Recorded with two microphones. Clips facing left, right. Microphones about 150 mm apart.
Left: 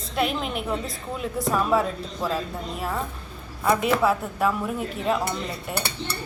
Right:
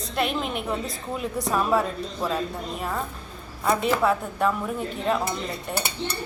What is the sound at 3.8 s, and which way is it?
A woman's voice, centre (ahead or behind).